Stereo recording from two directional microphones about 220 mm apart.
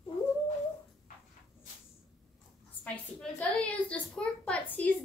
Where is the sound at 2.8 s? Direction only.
5° left (ahead or behind).